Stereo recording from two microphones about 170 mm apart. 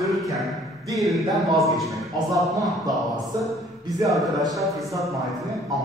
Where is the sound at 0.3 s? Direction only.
20° right (ahead or behind).